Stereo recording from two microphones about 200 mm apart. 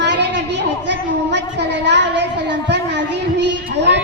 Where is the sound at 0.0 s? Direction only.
60° right (ahead or behind).